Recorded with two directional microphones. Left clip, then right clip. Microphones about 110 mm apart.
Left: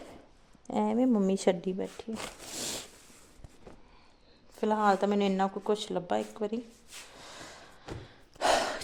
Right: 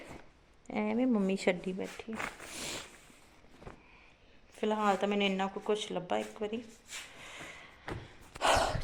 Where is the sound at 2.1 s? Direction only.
70° left (ahead or behind).